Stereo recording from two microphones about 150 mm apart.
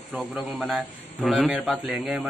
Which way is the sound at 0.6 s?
Centre (ahead or behind).